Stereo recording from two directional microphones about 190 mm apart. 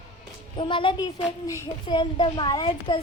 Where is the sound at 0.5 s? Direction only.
25° left (ahead or behind).